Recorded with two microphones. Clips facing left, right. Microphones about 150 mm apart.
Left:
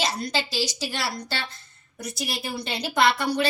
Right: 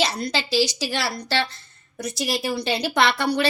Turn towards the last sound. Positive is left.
turn(degrees=-75)  # may be behind; listen again after turning